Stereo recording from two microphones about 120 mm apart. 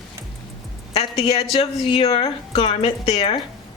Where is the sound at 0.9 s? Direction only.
55° left (ahead or behind).